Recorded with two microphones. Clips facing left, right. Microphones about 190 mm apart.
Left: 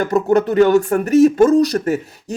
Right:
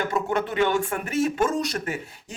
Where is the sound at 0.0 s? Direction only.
40° left (ahead or behind).